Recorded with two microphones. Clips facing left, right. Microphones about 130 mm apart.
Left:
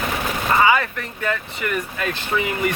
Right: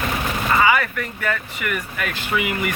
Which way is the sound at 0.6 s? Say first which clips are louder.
Left 1 dB; 25° left (ahead or behind).